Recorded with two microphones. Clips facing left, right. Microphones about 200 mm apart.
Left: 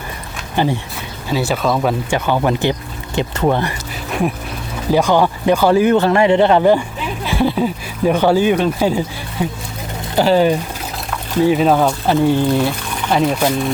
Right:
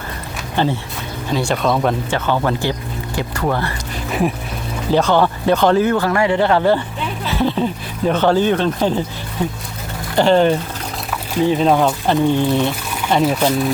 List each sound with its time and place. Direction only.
0.5 s speech: 10° left (ahead or behind)
4.9 s speech: 10° left (ahead or behind)
10.2 s speech: 5° left (ahead or behind)